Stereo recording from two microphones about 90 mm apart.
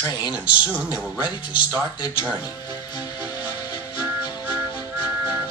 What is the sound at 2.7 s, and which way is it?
Music, 55° left (ahead or behind).